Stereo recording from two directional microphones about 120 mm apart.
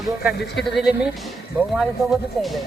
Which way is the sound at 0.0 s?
5° right (ahead or behind).